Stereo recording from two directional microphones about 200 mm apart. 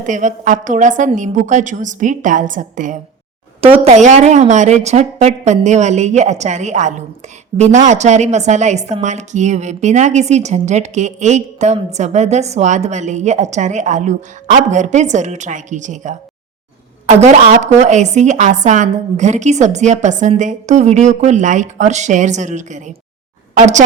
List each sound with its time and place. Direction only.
0.0 s a woman's voice: 40° right (ahead or behind)